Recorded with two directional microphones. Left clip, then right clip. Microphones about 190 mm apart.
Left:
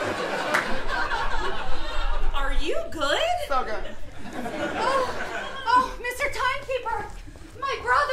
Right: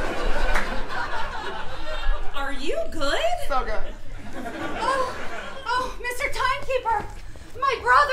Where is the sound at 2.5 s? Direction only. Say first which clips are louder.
Right 3 dB; 15° left (ahead or behind).